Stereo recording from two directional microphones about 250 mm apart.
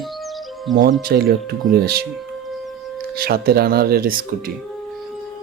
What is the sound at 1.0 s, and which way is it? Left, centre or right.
Speech, right.